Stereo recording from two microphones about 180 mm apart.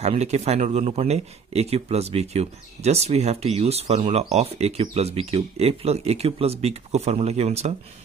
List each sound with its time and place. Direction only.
0.0 s speech: 35° right (ahead or behind)